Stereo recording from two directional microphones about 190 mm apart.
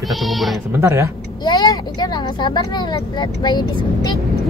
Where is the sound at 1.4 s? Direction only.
20° left (ahead or behind).